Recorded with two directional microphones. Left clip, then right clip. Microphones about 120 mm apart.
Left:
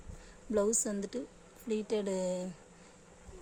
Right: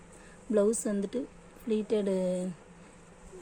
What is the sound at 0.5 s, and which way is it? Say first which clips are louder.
Speech: right 4 dB; 15° right (ahead or behind).